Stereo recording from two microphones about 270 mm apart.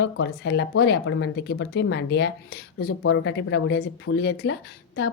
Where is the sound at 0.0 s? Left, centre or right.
Left.